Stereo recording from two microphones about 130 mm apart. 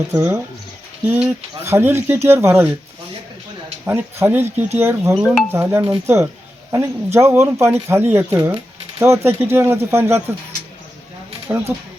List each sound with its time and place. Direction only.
0.1 s speech: 15° right (ahead or behind)
3.8 s speech: 20° right (ahead or behind)
5.9 s speech: 20° right (ahead or behind)
11.5 s speech: 20° right (ahead or behind)